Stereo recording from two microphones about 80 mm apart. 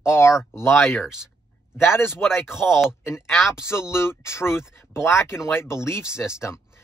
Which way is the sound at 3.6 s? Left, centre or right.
Left.